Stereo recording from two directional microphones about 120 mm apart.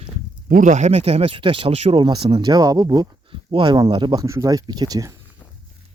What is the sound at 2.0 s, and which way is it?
Speech, 35° right (ahead or behind).